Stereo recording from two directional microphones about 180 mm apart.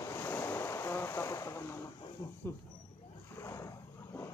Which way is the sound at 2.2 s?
15° left (ahead or behind).